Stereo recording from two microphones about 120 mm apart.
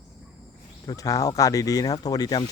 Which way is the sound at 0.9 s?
30° left (ahead or behind).